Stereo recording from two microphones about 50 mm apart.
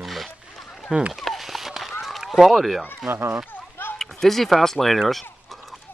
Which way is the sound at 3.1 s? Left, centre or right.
Right.